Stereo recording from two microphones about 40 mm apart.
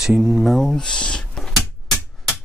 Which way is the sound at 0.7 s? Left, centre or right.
Left.